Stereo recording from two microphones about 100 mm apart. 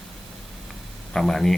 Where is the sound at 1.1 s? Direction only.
5° left (ahead or behind).